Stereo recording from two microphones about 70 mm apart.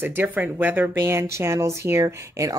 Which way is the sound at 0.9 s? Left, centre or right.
Right.